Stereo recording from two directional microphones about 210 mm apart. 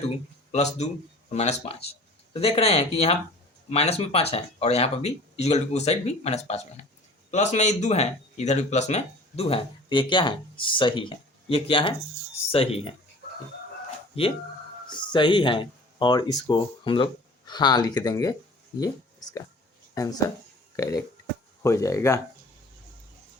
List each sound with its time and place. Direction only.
0.5 s speech: 30° left (ahead or behind)
14.8 s speech: 20° left (ahead or behind)
19.9 s speech: 15° left (ahead or behind)